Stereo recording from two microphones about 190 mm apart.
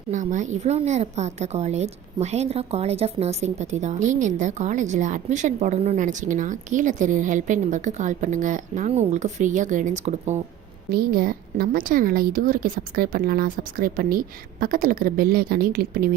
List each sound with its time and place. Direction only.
0.1 s a woman's voice: 40° right (ahead or behind)
10.9 s a woman's voice: 50° right (ahead or behind)